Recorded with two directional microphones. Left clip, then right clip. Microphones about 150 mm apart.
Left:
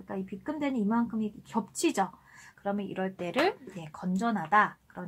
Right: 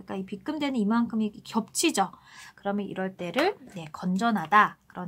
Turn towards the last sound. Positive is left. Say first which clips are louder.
# right 4 dB
turn(degrees=-25)  # may be behind; listen again after turning